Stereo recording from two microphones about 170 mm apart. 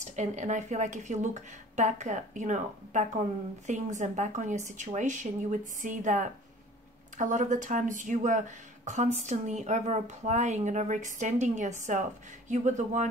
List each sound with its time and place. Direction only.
0.0 s speech: 45° right (ahead or behind)